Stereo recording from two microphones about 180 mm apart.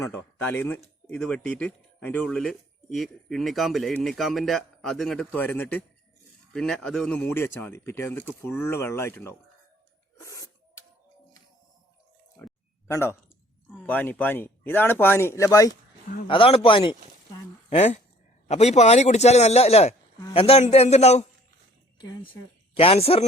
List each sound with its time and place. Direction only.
0.0 s speech: 10° left (ahead or behind)
10.2 s filing: 20° left (ahead or behind)
12.4 s a sound: 10° left (ahead or behind)
12.9 s speech: 15° left (ahead or behind)
16.2 s a man's voice: 30° left (ahead or behind)
21.9 s a woman's voice: 25° left (ahead or behind)